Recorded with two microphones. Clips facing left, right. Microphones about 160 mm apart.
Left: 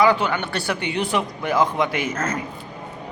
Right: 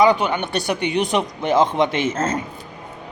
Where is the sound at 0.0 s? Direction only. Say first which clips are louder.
Right 2 dB; 20° right (ahead or behind).